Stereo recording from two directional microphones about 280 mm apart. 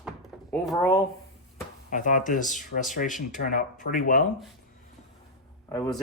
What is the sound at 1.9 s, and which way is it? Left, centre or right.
Speech, left.